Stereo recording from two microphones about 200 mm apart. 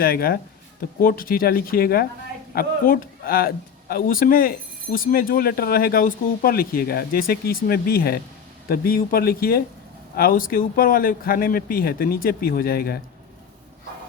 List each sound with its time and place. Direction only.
0.0 s a man's voice: 50° left (ahead or behind)